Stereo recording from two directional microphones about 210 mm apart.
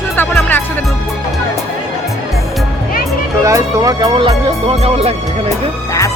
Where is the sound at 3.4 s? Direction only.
15° right (ahead or behind).